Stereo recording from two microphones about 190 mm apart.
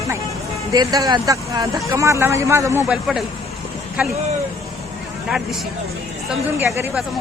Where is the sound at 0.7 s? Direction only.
20° right (ahead or behind); by 3.2 s 5° right (ahead or behind).